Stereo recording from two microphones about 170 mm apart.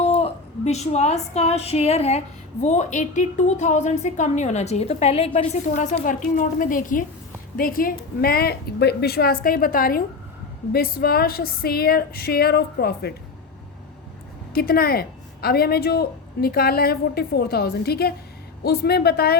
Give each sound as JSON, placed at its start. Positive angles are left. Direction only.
{"t": 0.0, "sound": "a woman's voice", "side_deg": 35}
{"t": 14.5, "sound": "a woman's voice", "side_deg": 60}